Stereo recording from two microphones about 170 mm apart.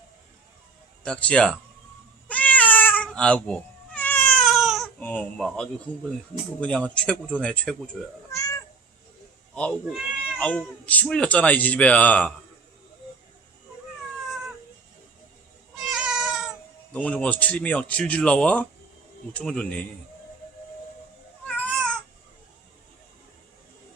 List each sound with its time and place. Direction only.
1.0 s speech: 5° left (ahead or behind)
2.2 s cat: 10° left (ahead or behind)
4.9 s speech: 10° left (ahead or behind)
8.3 s cat: 15° left (ahead or behind)
9.9 s speech: 5° left (ahead or behind)
15.9 s cat: centre (ahead or behind)
16.9 s speech: 5° left (ahead or behind)
21.4 s baby cry: 5° left (ahead or behind)